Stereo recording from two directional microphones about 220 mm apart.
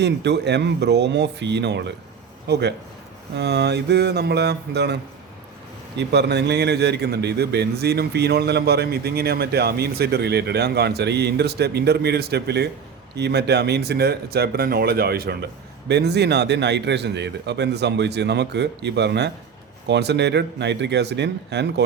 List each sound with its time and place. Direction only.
0.0 s a man's voice: 50° right (ahead or behind)
6.0 s a man's voice: 50° right (ahead or behind)